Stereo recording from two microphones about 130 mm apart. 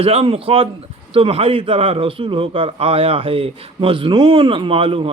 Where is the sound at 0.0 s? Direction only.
50° right (ahead or behind).